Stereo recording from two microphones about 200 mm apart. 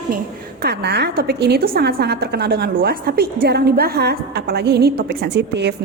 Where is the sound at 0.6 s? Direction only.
55° right (ahead or behind).